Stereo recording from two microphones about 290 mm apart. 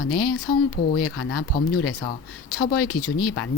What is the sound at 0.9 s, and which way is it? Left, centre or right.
Speech, left.